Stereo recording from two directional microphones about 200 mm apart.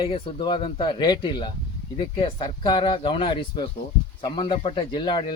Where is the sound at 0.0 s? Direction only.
25° left (ahead or behind).